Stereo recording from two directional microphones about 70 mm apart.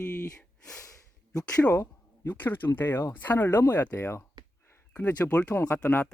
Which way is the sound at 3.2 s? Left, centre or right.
Left.